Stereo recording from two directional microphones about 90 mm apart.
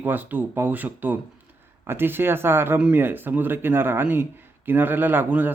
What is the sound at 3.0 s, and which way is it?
Speech, 20° right (ahead or behind).